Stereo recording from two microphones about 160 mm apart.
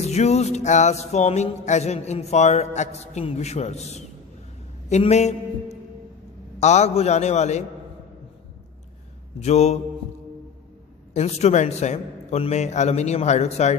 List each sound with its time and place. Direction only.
0.0 s music: 45° left (ahead or behind)
4.8 s a sound: 45° left (ahead or behind)
6.6 s music: 45° left (ahead or behind)
9.4 s music: 45° left (ahead or behind)
11.1 s music: 45° left (ahead or behind)